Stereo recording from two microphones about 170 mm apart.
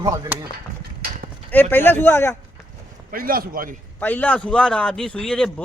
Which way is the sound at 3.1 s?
60° right (ahead or behind).